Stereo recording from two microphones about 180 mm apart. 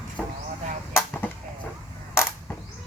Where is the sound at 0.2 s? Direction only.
5° left (ahead or behind).